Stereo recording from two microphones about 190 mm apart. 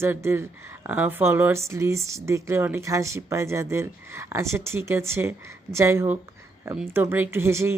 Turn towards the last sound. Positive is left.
turn(degrees=-15)  # may be behind; listen again after turning